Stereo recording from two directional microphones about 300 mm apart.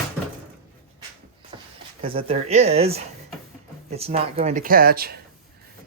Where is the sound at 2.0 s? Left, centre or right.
Centre.